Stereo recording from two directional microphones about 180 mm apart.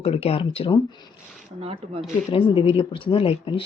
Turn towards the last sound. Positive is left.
turn(degrees=30)  # may be behind; listen again after turning